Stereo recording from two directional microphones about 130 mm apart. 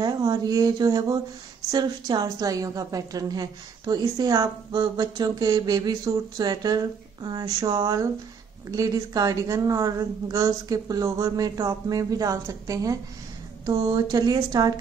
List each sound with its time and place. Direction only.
0.0 s a woman's voice: 30° right (ahead or behind)